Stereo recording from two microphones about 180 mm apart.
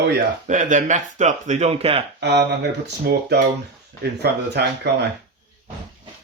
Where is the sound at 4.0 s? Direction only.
65° right (ahead or behind).